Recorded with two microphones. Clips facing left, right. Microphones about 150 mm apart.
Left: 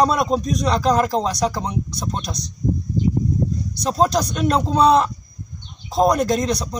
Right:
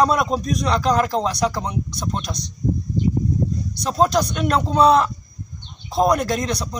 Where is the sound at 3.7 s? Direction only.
Centre (ahead or behind).